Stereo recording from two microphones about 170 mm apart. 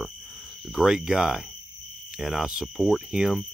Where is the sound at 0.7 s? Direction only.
Centre (ahead or behind).